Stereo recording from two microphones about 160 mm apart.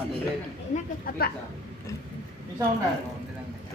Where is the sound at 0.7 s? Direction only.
70° left (ahead or behind).